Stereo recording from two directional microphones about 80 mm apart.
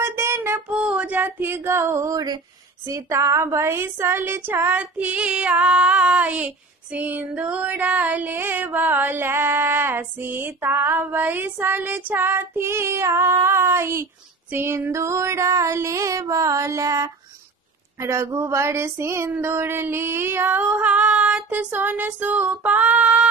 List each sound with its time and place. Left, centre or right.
0.0 s music: right
0.7 s music: centre; by 2.2 s right
2.8 s child singing: right
14.5 s music: right
19.5 s child singing: right